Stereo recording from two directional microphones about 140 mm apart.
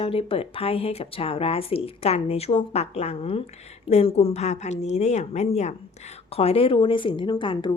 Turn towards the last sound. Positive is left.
turn(degrees=35)  # may be behind; listen again after turning